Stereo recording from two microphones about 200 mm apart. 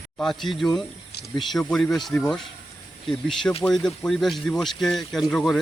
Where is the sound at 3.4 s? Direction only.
30° left (ahead or behind).